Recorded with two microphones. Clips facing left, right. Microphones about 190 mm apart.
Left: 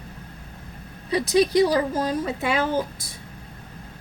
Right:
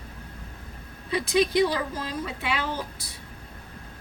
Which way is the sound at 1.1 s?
40° left (ahead or behind).